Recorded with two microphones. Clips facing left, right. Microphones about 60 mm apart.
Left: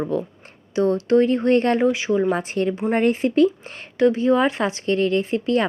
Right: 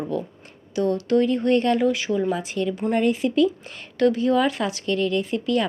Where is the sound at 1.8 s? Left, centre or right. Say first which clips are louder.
Left 3 dB; left.